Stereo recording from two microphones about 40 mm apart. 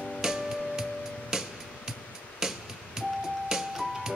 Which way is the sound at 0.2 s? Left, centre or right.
Centre.